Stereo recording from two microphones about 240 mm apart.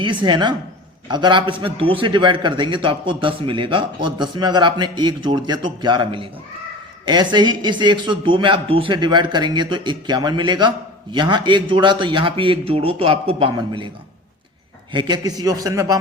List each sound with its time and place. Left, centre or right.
0.0 s a man's voice: centre
14.9 s a man's voice: centre